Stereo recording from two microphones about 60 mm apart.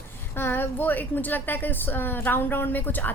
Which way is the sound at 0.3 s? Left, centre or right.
Left.